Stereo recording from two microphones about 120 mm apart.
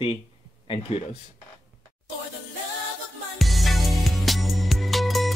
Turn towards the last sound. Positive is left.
turn(degrees=0)  # may be behind; listen again after turning